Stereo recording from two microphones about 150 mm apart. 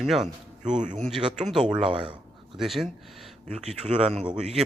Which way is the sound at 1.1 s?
5° right (ahead or behind).